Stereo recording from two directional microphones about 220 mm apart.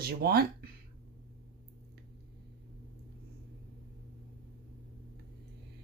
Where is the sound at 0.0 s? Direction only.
45° right (ahead or behind).